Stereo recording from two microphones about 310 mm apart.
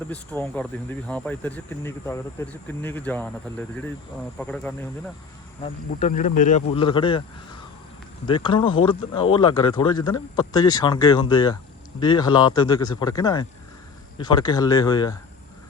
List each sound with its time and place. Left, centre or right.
0.1 s speech: centre
4.4 s speech: centre
5.6 s speech: left
8.3 s speech: centre